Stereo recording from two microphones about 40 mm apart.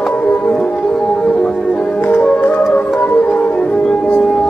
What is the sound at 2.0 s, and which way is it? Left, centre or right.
Music, left.